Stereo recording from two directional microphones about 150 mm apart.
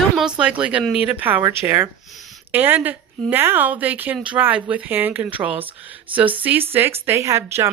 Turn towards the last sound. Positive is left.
turn(degrees=-20)  # may be behind; listen again after turning